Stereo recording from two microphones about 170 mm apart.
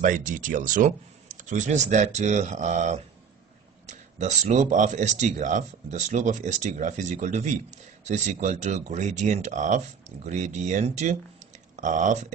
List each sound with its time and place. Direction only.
0.0 s speech: 50° right (ahead or behind)